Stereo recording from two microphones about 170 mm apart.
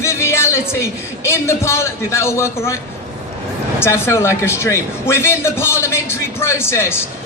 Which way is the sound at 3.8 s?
15° left (ahead or behind).